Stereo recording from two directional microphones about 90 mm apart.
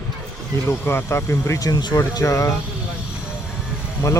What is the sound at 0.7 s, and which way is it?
Speech, 25° left (ahead or behind).